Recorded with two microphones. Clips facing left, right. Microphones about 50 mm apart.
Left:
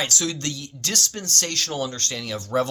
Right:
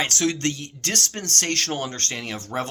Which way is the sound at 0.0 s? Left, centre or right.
Right.